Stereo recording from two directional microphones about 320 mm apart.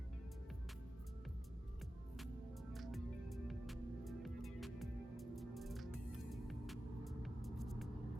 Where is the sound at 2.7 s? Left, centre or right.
Centre.